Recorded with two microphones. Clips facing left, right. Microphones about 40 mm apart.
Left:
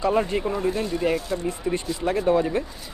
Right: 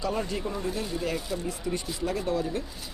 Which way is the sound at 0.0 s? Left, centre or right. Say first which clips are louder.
Left 8 dB; left.